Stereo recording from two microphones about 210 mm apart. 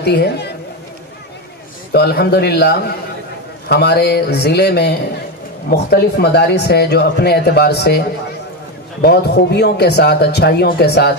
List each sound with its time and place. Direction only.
0.0 s a woman's voice: 50° left (ahead or behind)
1.9 s speech: 50° left (ahead or behind)
9.0 s speech: 50° left (ahead or behind)